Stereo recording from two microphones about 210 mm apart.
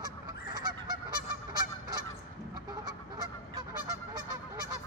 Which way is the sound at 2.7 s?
20° right (ahead or behind).